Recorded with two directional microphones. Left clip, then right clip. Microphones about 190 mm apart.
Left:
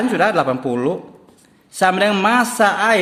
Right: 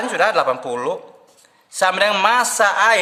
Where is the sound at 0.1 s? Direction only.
Centre (ahead or behind).